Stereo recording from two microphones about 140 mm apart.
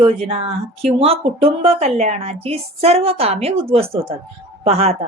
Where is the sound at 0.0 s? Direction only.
45° right (ahead or behind).